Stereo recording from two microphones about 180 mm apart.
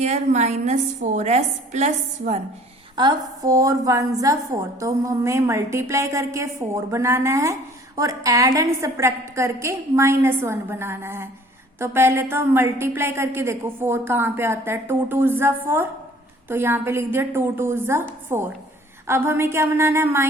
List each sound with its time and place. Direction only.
0.0 s a woman's voice: 40° right (ahead or behind)
2.9 s a woman's voice: 25° right (ahead or behind)